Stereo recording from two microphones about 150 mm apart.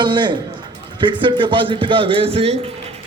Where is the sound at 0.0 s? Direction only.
30° right (ahead or behind).